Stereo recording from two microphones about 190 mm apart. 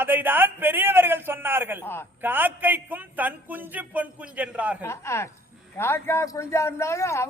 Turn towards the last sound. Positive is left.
turn(degrees=15)  # may be behind; listen again after turning